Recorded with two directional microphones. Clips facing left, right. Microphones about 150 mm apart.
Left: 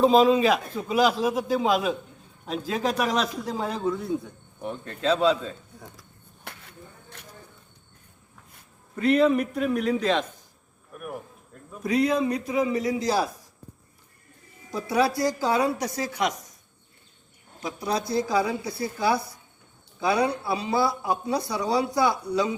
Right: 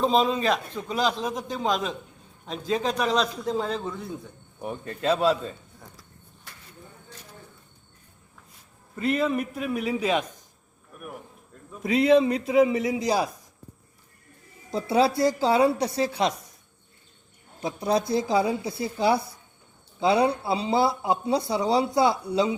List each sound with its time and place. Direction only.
0.0 s a man's voice: 5° left (ahead or behind)
4.6 s a man's voice: 5° right (ahead or behind)
6.4 s a sound: 65° left (ahead or behind)
9.0 s a man's voice: centre (ahead or behind)
11.9 s speech: 25° right (ahead or behind)
14.7 s speech: 25° right (ahead or behind)
17.6 s speech: 25° right (ahead or behind)